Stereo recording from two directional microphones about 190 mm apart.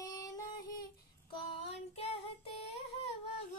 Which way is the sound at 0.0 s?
15° left (ahead or behind).